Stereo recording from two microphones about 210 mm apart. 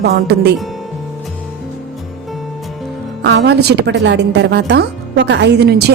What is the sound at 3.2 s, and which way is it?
A woman's voice, 55° right (ahead or behind).